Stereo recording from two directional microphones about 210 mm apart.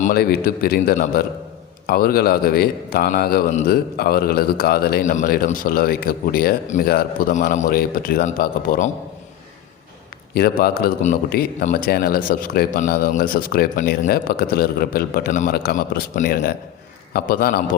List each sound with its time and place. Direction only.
0.0 s a man's voice: 45° left (ahead or behind)
10.3 s a man's voice: 45° left (ahead or behind)